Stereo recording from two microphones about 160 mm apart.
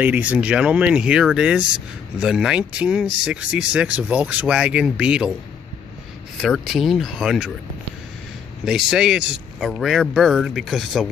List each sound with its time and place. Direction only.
0.0 s speech: 10° right (ahead or behind)
6.3 s speech: centre (ahead or behind)
8.6 s speech: 5° right (ahead or behind)